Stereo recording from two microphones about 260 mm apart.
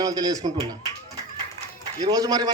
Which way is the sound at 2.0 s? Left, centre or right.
Centre.